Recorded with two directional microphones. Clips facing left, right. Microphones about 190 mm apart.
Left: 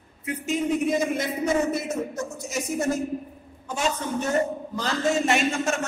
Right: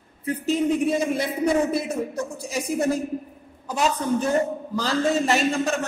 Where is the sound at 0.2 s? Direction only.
35° right (ahead or behind).